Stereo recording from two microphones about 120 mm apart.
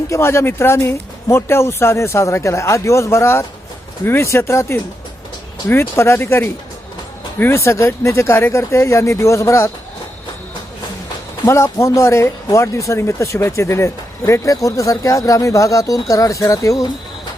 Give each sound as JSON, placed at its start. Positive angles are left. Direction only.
{"t": 0.1, "sound": "speech", "side_deg": 25}
{"t": 11.4, "sound": "speech", "side_deg": 20}